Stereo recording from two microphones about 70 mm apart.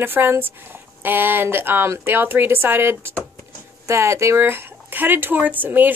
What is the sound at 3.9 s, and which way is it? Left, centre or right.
A woman's voice, right.